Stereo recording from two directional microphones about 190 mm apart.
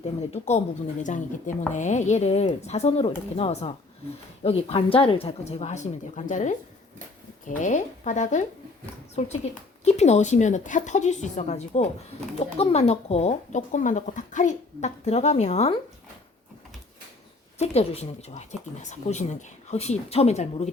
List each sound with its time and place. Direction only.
0.0 s speech: 35° left (ahead or behind)
17.6 s speech: 35° left (ahead or behind)